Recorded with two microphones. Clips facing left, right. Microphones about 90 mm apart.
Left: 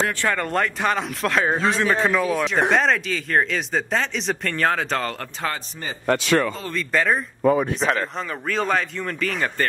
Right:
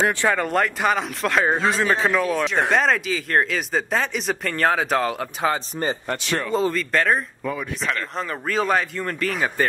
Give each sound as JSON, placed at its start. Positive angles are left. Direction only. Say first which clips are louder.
{"t": 0.0, "sound": "speech", "louder": "right 3 dB", "side_deg": -15}
{"t": 0.4, "sound": "speech", "louder": "right 1 dB", "side_deg": -5}
{"t": 6.0, "sound": "speech", "louder": "left 6 dB", "side_deg": 90}
{"t": 6.7, "sound": "speech", "louder": "right 1 dB", "side_deg": 0}
{"t": 7.4, "sound": "speech", "louder": "left 8 dB", "side_deg": 40}
{"t": 8.2, "sound": "speech", "louder": "right 1 dB", "side_deg": 0}